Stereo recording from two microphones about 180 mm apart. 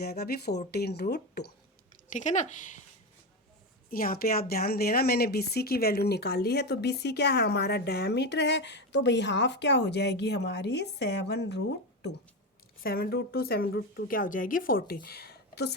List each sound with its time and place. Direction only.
0.0 s a woman's voice: 60° left (ahead or behind)
2.0 s speech: 45° left (ahead or behind)
3.8 s a woman's voice: 55° left (ahead or behind); by 11.6 s 70° left (ahead or behind)
12.8 s a woman's voice: 55° left (ahead or behind)